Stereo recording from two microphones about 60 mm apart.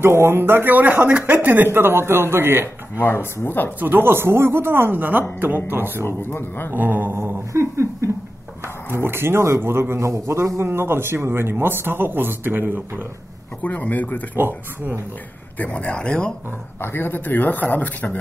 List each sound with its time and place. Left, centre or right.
0.0 s a man's voice: right
3.0 s speech: left
3.8 s a man's voice: right
6.0 s speech: left
6.7 s a man's voice: right
7.2 s a sound: right
9.0 s a man's voice: right
13.6 s speech: left
15.6 s speech: left
16.8 s speech: left